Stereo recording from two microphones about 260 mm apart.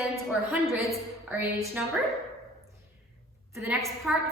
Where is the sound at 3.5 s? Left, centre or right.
Centre.